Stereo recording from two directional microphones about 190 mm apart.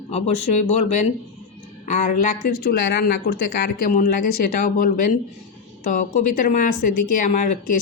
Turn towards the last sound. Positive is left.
turn(degrees=40)  # may be behind; listen again after turning